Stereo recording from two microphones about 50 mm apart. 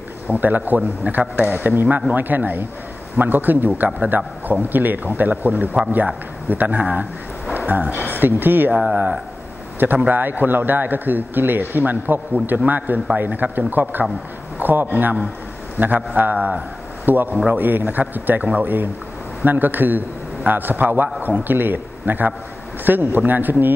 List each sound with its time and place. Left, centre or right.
0.3 s a man's voice: right
10.0 s a man's voice: right